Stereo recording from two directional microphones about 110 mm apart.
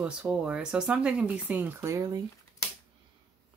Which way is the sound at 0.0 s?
10° right (ahead or behind).